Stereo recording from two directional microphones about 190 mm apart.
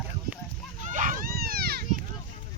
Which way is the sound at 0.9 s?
40° right (ahead or behind).